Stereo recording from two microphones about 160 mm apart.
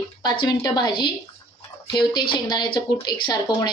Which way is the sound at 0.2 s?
25° left (ahead or behind).